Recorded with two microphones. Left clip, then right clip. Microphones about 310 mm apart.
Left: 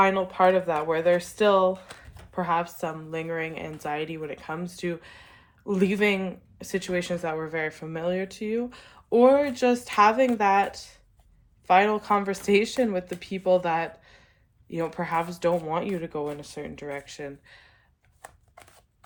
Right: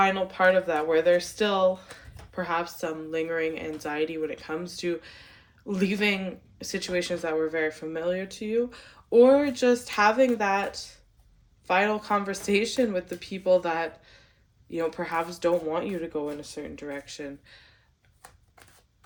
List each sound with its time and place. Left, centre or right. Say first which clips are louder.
0.0 s speech: left 1 dB; centre